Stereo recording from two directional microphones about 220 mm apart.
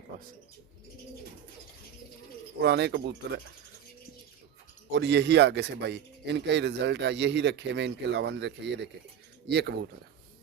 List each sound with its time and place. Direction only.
2.6 s speech: 50° right (ahead or behind)
4.9 s speech: 55° right (ahead or behind)